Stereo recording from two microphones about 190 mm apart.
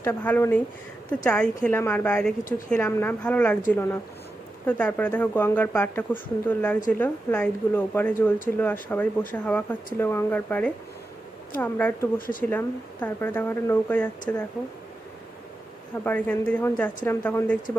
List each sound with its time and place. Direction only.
0.0 s speech: 10° left (ahead or behind)
16.0 s speech: 10° left (ahead or behind)